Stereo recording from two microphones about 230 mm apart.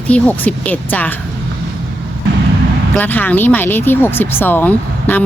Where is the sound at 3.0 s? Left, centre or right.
Centre.